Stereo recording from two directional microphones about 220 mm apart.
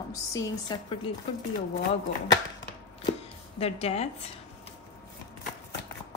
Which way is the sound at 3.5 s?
30° left (ahead or behind).